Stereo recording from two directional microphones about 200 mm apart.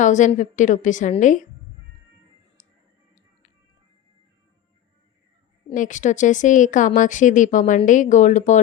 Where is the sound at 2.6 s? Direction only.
40° left (ahead or behind).